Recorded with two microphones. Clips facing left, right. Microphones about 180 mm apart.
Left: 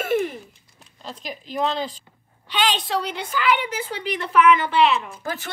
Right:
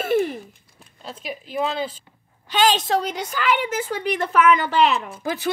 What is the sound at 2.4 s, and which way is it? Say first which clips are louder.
A woman's voice: right 4 dB; 45° right (ahead or behind).